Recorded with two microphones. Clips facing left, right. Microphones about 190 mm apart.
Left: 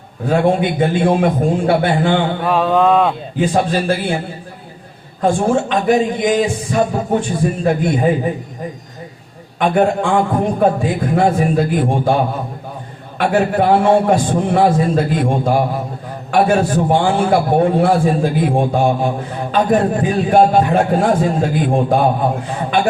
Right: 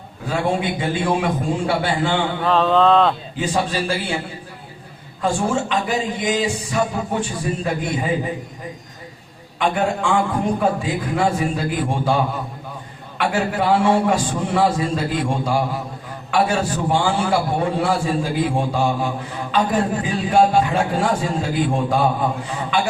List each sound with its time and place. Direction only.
0.3 s a man's voice: 50° left (ahead or behind)
2.4 s speech: 10° left (ahead or behind)
3.4 s a man's voice: 55° left (ahead or behind)
5.2 s a man's voice: 55° left (ahead or behind)
9.6 s a man's voice: 55° left (ahead or behind)